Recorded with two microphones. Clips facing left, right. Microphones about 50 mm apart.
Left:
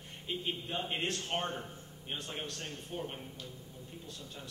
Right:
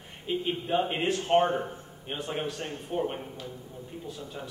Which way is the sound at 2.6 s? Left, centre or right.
Right.